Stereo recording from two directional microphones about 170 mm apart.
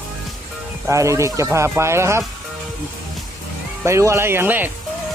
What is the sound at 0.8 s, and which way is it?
Speech, 20° right (ahead or behind).